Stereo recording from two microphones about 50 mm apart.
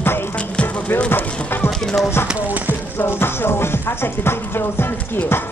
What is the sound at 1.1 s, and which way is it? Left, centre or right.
Speech, left.